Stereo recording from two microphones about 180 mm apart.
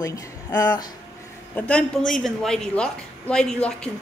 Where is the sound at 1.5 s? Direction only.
10° left (ahead or behind).